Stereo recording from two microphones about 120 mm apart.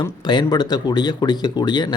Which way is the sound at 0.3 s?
35° left (ahead or behind).